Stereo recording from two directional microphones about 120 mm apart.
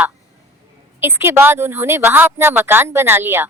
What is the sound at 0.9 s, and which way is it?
Speech, 20° right (ahead or behind).